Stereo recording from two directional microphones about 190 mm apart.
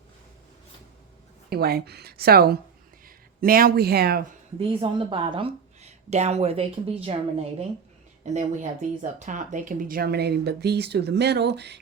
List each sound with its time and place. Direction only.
1.5 s speech: 55° right (ahead or behind)
4.6 s a woman's voice: 30° right (ahead or behind); by 11.8 s 60° right (ahead or behind)